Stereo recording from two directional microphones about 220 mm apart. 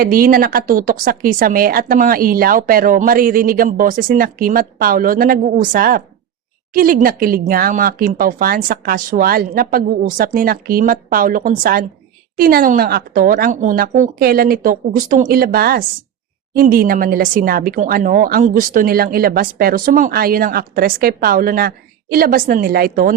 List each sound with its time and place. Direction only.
0.0 s a woman's voice: 40° right (ahead or behind)